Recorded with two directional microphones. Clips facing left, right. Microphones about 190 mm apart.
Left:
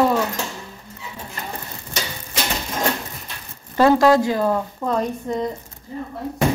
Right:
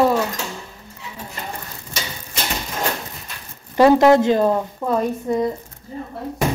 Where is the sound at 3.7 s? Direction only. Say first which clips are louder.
Right 2 dB; 20° right (ahead or behind).